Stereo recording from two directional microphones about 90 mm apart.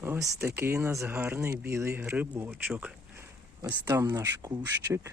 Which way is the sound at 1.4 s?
30° right (ahead or behind).